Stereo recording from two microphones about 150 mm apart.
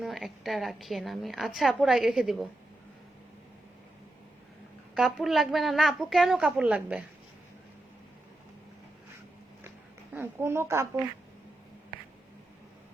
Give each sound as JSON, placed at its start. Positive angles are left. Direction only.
{"t": 0.0, "sound": "a woman's voice", "side_deg": 0}
{"t": 4.9, "sound": "a woman's voice", "side_deg": 0}
{"t": 10.2, "sound": "a woman's voice", "side_deg": -15}